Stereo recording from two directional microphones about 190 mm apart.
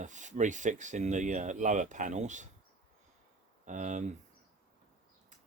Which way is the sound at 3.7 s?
40° right (ahead or behind).